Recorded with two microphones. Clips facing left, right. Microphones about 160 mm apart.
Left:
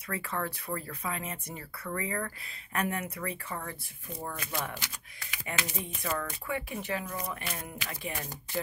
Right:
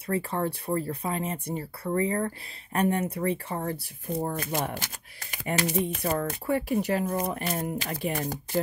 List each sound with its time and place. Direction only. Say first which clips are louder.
0.0 s speech: right 7 dB; 30° right (ahead or behind); by 5.4 s 45° right (ahead or behind)
5.5 s speech: right 10 dB; 35° right (ahead or behind)